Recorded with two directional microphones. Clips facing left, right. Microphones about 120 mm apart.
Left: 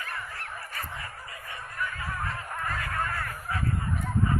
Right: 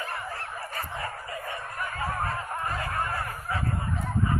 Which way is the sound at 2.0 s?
45° right (ahead or behind).